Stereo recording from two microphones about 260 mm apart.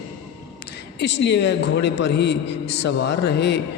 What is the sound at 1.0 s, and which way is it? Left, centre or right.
A man's voice, left.